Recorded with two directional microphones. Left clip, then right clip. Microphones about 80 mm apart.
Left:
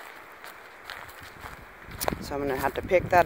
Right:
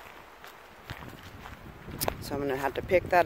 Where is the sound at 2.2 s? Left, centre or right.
Right.